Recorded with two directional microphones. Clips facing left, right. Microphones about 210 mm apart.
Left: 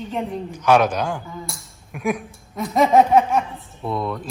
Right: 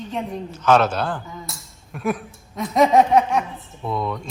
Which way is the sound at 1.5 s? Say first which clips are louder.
Left 1 dB; 10° left (ahead or behind).